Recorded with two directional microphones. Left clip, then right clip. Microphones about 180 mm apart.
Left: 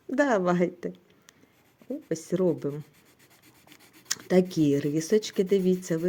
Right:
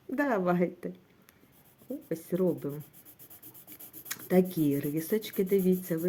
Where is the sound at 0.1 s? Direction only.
30° left (ahead or behind).